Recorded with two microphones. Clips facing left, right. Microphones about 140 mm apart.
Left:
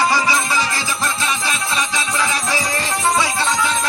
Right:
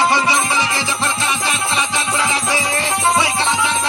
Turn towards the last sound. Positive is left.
turn(degrees=-25)  # may be behind; listen again after turning